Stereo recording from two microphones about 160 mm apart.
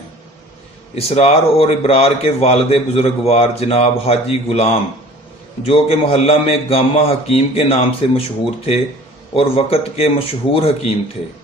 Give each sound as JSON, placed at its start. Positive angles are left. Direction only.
{"t": 0.9, "sound": "speech", "side_deg": 40}
{"t": 9.3, "sound": "speech", "side_deg": 35}